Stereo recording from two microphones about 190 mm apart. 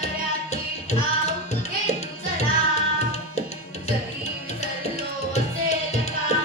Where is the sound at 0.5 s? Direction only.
35° left (ahead or behind).